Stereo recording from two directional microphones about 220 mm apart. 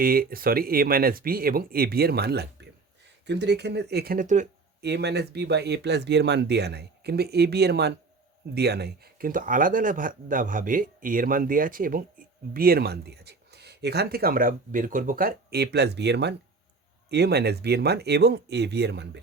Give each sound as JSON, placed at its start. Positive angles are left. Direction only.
{"t": 0.0, "sound": "speech", "side_deg": -40}
{"t": 4.8, "sound": "speech", "side_deg": -50}